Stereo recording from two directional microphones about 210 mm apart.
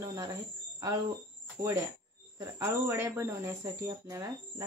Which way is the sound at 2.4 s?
15° right (ahead or behind).